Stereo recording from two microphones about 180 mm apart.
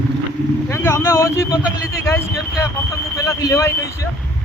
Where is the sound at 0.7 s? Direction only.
15° left (ahead or behind).